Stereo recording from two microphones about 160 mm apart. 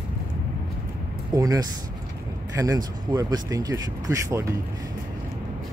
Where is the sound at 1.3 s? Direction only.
25° right (ahead or behind).